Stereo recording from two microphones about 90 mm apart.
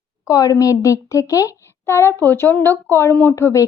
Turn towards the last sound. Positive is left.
turn(degrees=35)  # may be behind; listen again after turning